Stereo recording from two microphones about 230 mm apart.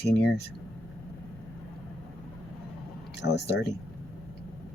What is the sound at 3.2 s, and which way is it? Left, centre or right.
Speech, left.